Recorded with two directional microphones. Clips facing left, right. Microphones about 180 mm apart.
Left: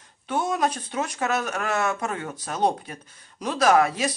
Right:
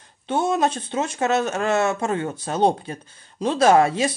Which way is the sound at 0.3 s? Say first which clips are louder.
Right 4 dB; 25° right (ahead or behind).